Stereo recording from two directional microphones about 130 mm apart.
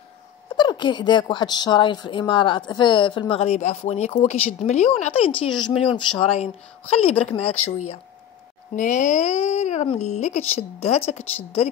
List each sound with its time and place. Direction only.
0.6 s a woman's voice: 35° left (ahead or behind)
8.7 s a woman's voice: 75° left (ahead or behind); by 11.7 s 50° left (ahead or behind)